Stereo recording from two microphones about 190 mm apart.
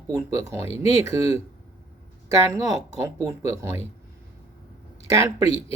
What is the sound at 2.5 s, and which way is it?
Speech, 15° right (ahead or behind).